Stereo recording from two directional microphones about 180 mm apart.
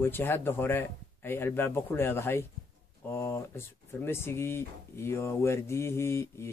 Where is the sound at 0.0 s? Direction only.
10° left (ahead or behind).